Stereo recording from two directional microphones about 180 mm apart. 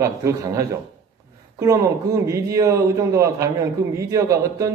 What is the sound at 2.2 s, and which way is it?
Speech, 15° right (ahead or behind).